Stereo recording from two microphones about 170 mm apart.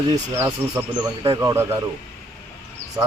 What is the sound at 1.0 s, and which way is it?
Speech, 30° right (ahead or behind).